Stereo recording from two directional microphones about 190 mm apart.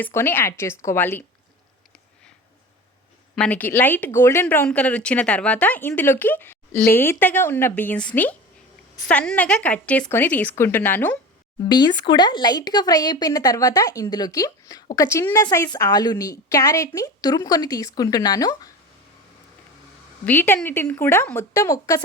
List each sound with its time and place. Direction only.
0.0 s speech: 10° left (ahead or behind)
3.3 s speech: 5° left (ahead or behind)
11.6 s a woman's voice: 20° left (ahead or behind)
20.2 s speech: 10° left (ahead or behind)